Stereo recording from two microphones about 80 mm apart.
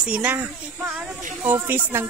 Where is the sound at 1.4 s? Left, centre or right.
Right.